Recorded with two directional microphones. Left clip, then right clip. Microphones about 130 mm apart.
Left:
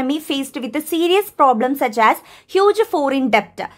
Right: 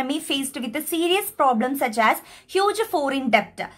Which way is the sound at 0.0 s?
35° left (ahead or behind).